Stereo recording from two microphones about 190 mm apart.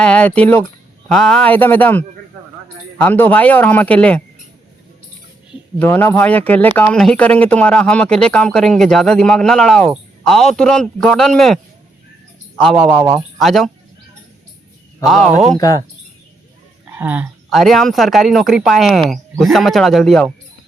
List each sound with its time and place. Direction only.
0.0 s a man's voice: 5° left (ahead or behind)
5.8 s a man's voice: 10° left (ahead or behind)
15.0 s speech: centre (ahead or behind)
15.5 s speech: 20° left (ahead or behind)
16.9 s speech: 10° right (ahead or behind)